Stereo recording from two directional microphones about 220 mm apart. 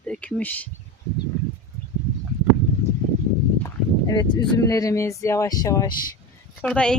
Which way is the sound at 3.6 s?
15° left (ahead or behind).